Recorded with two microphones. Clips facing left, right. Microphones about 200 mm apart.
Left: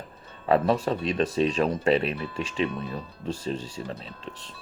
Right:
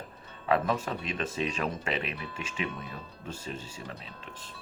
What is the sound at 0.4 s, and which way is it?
Speech, 35° left (ahead or behind).